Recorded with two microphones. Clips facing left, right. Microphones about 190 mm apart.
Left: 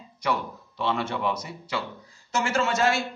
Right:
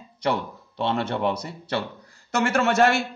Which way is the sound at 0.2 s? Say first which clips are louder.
Right 3 dB; 60° right (ahead or behind).